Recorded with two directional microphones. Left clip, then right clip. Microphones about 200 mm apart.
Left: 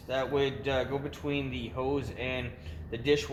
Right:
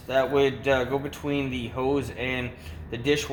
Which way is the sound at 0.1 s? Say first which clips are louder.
Right 7 dB; 40° right (ahead or behind).